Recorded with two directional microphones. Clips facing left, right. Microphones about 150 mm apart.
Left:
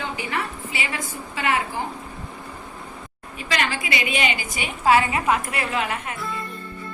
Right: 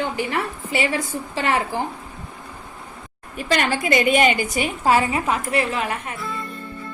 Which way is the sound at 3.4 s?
45° right (ahead or behind).